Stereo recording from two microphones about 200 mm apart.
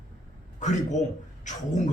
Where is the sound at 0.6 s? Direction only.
35° left (ahead or behind).